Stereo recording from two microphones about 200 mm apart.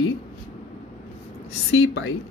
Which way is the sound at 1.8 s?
60° left (ahead or behind).